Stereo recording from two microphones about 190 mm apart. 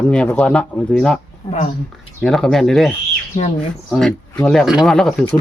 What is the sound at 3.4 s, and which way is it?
Speech, 35° left (ahead or behind).